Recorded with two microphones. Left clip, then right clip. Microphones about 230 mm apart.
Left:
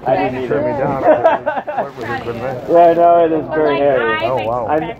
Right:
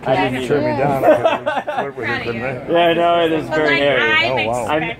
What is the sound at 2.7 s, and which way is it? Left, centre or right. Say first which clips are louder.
Speech: left 5 dB; right.